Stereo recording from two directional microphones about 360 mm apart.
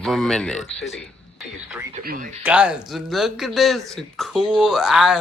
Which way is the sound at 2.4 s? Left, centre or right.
Centre.